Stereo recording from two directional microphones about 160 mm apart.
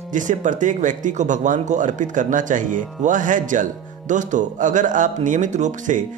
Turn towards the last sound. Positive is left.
turn(degrees=-50)  # may be behind; listen again after turning